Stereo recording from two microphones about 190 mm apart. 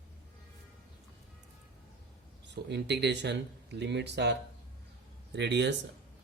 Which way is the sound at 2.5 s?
65° right (ahead or behind).